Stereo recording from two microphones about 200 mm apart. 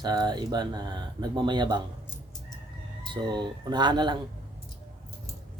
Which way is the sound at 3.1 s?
20° right (ahead or behind).